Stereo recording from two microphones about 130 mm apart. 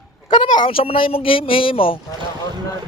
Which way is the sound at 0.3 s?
40° left (ahead or behind).